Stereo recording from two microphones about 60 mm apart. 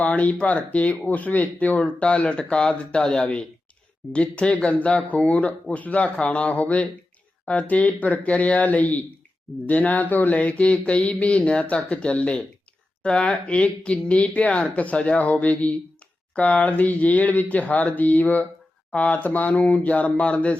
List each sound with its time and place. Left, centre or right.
0.0 s speech: left; by 3.2 s centre
4.1 s speech: centre